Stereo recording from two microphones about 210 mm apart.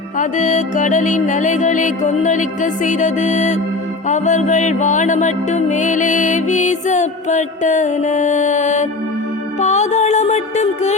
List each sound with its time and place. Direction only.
0.2 s music: 35° left (ahead or behind)